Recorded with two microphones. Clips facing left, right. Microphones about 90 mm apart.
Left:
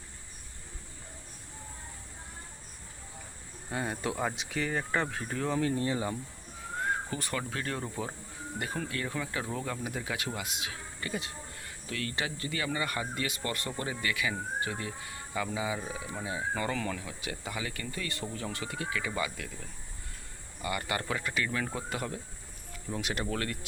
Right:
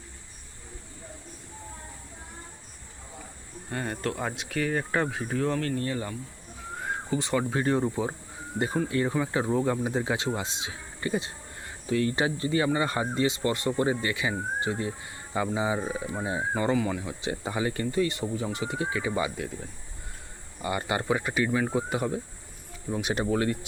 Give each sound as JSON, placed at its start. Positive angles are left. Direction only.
{"t": 3.7, "sound": "speech", "side_deg": 5}
{"t": 5.5, "sound": "speech", "side_deg": 15}
{"t": 6.7, "sound": "a sound", "side_deg": -10}
{"t": 7.2, "sound": "speech", "side_deg": -20}
{"t": 16.7, "sound": "speech", "side_deg": -15}
{"t": 17.0, "sound": "speech", "side_deg": -25}